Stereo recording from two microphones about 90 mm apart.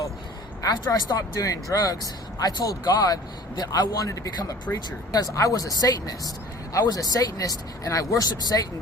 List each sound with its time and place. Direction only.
0.6 s a man's voice: 45° left (ahead or behind)